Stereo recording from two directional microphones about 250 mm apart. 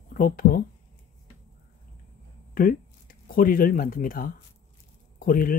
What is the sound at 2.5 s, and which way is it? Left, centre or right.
Speech, left.